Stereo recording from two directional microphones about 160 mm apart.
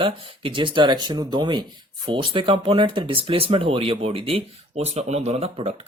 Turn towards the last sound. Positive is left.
turn(degrees=-40)  # may be behind; listen again after turning